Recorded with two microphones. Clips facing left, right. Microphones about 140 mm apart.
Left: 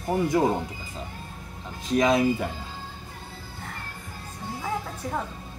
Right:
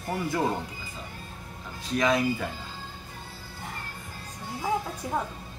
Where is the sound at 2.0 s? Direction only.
20° left (ahead or behind).